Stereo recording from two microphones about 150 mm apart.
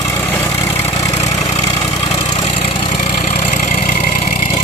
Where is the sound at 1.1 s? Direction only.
45° left (ahead or behind).